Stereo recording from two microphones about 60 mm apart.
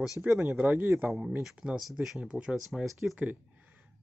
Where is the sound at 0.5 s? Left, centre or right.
Right.